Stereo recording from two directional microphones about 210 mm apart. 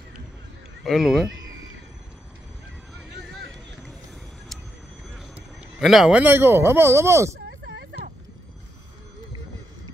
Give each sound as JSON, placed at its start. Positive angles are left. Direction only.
{"t": 0.8, "sound": "speech", "side_deg": 0}
{"t": 5.1, "sound": "a man's voice", "side_deg": -5}
{"t": 7.4, "sound": "a sound", "side_deg": -55}